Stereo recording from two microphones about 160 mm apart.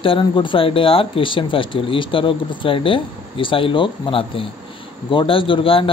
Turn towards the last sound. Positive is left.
turn(degrees=35)  # may be behind; listen again after turning